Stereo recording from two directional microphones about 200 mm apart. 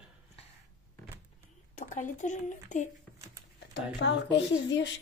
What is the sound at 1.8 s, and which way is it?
Speech, 40° left (ahead or behind).